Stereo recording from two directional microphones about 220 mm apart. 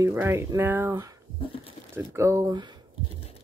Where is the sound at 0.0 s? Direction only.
10° right (ahead or behind).